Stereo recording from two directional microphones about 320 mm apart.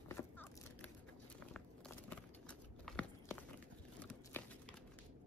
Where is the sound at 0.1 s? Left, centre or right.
Centre.